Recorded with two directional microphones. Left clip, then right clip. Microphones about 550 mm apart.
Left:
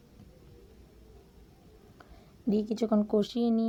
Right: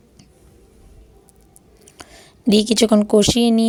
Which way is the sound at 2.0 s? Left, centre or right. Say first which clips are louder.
Right 16 dB; centre.